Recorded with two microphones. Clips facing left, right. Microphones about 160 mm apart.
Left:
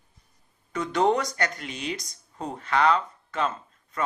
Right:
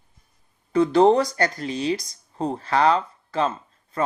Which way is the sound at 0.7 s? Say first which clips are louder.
Right 7 dB; 30° right (ahead or behind).